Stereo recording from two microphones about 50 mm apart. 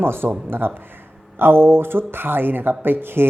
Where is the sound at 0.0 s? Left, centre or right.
Right.